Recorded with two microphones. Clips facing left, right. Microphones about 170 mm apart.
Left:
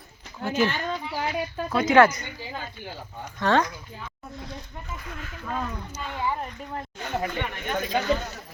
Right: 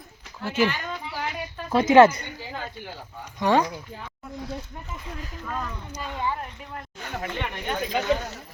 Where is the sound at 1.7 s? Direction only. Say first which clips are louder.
Right 3 dB; 25° right (ahead or behind).